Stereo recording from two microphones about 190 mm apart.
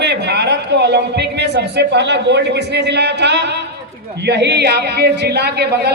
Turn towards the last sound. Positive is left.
turn(degrees=-60)  # may be behind; listen again after turning